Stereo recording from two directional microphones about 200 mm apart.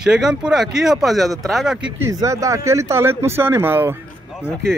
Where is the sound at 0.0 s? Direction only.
5° right (ahead or behind).